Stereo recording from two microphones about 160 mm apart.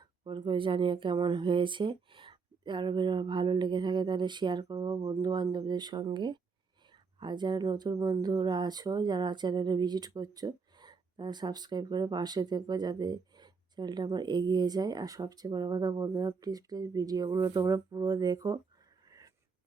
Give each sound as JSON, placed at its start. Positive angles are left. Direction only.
{"t": 0.0, "sound": "speech", "side_deg": -30}
{"t": 19.0, "sound": "dog", "side_deg": -20}